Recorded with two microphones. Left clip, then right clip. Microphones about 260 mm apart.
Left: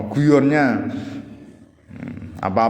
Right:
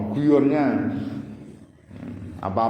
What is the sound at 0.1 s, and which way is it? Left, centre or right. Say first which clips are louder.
Speech: left 3 dB; left.